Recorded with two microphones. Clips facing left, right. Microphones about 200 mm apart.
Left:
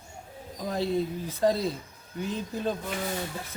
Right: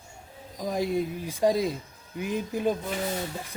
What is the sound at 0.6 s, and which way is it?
Speech, 10° right (ahead or behind).